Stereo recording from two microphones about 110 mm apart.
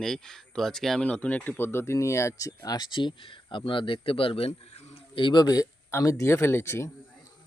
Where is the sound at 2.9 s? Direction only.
50° left (ahead or behind); by 5.0 s 70° left (ahead or behind).